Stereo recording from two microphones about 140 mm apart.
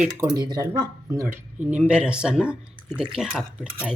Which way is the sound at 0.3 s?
30° right (ahead or behind).